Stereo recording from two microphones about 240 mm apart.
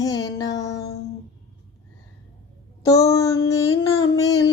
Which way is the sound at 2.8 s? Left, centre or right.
Centre.